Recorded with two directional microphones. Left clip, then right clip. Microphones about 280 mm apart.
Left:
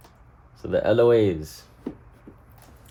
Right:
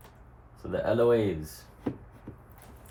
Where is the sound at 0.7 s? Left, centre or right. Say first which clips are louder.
Left 6 dB; left.